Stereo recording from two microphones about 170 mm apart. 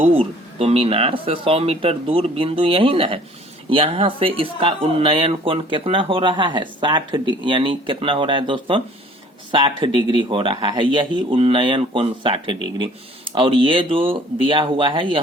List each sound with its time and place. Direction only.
0.0 s speech: 35° right (ahead or behind)